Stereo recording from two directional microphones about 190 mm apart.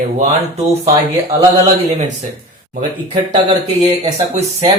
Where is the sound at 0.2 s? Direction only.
35° right (ahead or behind).